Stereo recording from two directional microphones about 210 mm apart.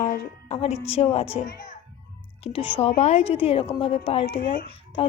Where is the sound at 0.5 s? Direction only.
30° left (ahead or behind).